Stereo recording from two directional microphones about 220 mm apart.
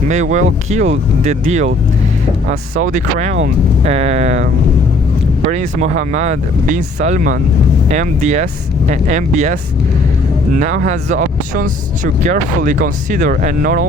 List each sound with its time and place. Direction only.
0.1 s speech: 35° right (ahead or behind)
5.5 s speech: 35° right (ahead or behind)
10.6 s speech: 35° right (ahead or behind)